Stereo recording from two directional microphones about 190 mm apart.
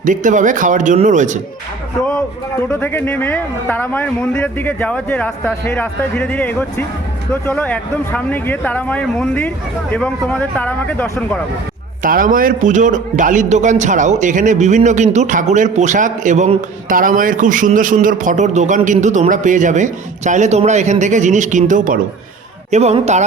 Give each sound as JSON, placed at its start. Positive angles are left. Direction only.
{"t": 0.0, "sound": "a man's voice", "side_deg": -40}
{"t": 2.6, "sound": "a man's voice", "side_deg": 10}
{"t": 12.0, "sound": "a man's voice", "side_deg": -45}